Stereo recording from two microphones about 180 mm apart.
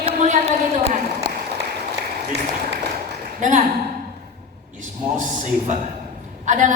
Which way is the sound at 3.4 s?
45° right (ahead or behind).